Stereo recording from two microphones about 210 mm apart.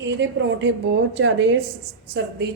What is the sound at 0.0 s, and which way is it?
A woman's voice, 60° right (ahead or behind).